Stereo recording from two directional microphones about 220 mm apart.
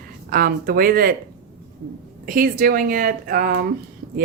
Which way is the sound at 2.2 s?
40° right (ahead or behind).